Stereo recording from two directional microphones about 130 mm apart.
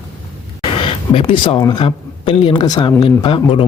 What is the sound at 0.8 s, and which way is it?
Speech, 40° left (ahead or behind).